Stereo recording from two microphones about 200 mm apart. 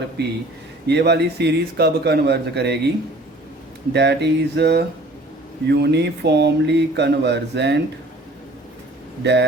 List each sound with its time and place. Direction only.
0.2 s speech: 55° right (ahead or behind)
3.9 s speech: 55° right (ahead or behind)
9.2 s speech: 60° right (ahead or behind)